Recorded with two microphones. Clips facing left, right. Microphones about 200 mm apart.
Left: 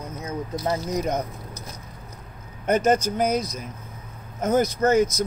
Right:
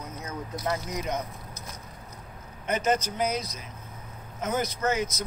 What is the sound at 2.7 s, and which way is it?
Speech, 45° left (ahead or behind).